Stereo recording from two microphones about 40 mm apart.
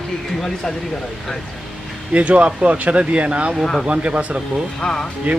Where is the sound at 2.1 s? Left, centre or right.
Right.